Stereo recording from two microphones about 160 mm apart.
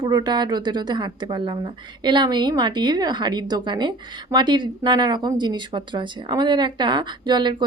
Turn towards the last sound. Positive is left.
turn(degrees=-30)  # may be behind; listen again after turning